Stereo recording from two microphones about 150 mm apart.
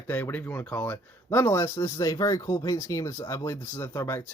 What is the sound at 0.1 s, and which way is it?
Speech, 15° left (ahead or behind).